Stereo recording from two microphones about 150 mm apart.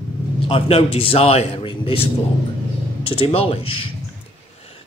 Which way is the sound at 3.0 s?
40° left (ahead or behind).